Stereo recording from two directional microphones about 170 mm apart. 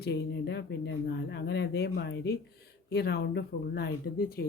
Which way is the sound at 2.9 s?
75° left (ahead or behind).